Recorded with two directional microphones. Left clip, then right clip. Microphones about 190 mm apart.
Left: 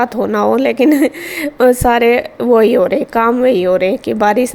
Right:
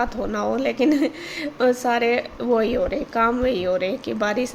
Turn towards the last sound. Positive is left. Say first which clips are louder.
# left 11 dB
turn(degrees=40)  # may be behind; listen again after turning